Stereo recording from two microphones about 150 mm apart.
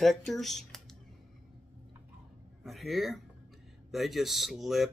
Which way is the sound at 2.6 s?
Centre (ahead or behind).